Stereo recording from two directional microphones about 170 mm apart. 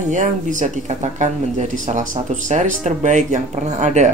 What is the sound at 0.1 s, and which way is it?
Speech, 50° right (ahead or behind).